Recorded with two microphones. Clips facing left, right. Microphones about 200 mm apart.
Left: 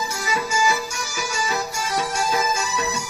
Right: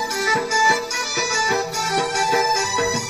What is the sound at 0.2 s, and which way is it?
Music, 55° right (ahead or behind).